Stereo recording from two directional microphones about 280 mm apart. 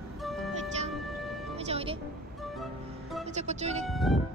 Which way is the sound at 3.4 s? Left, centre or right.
Right.